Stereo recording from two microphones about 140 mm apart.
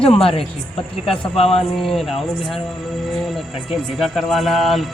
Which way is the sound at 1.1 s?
45° left (ahead or behind).